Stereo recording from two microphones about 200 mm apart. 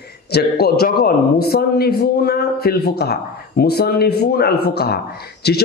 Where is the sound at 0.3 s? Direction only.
55° left (ahead or behind).